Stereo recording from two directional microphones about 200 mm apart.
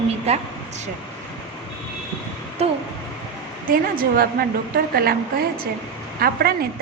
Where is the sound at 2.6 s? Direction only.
30° right (ahead or behind).